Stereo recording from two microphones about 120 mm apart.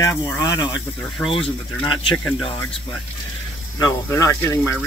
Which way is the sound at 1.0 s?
5° left (ahead or behind).